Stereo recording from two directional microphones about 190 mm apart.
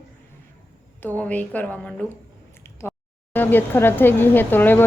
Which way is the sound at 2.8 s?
10° left (ahead or behind).